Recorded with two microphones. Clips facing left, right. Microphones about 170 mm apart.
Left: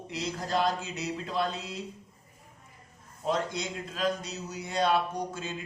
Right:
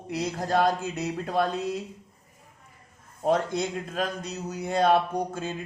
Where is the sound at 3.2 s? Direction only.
55° right (ahead or behind).